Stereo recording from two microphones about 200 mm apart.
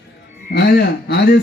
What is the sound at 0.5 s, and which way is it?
Speech, 55° left (ahead or behind).